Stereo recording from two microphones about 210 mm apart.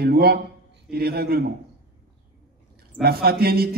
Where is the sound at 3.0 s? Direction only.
45° right (ahead or behind).